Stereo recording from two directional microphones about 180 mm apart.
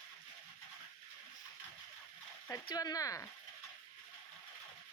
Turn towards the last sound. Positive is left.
turn(degrees=20)  # may be behind; listen again after turning